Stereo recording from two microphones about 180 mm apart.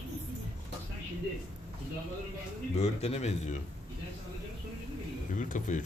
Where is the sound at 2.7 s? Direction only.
35° left (ahead or behind).